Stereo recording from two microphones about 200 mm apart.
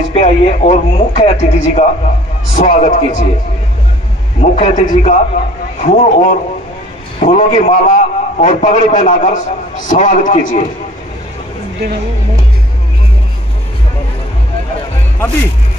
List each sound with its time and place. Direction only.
0.1 s a man's voice: 35° left (ahead or behind)
4.4 s a man's voice: 30° left (ahead or behind)